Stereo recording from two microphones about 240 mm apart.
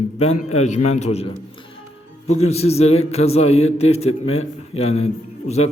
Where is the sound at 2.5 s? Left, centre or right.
Left.